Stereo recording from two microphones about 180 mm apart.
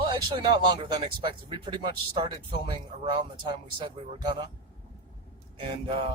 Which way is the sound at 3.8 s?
30° right (ahead or behind).